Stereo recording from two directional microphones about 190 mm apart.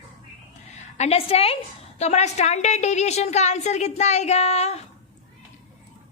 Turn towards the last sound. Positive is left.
turn(degrees=35)  # may be behind; listen again after turning